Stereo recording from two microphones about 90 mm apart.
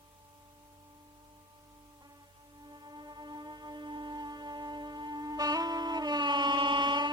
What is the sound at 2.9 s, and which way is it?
Music, 50° right (ahead or behind).